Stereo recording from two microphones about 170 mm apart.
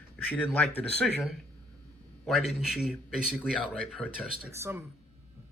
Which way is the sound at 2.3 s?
Centre (ahead or behind).